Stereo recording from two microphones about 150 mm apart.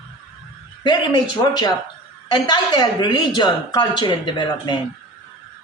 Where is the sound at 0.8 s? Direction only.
30° left (ahead or behind).